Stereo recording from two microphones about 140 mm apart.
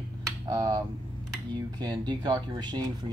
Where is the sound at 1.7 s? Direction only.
30° right (ahead or behind).